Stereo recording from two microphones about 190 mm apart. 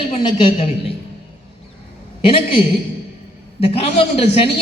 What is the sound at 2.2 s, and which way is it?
A man's voice, 25° left (ahead or behind).